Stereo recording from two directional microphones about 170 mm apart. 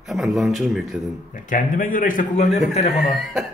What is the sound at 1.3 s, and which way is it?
A man's voice, 50° left (ahead or behind).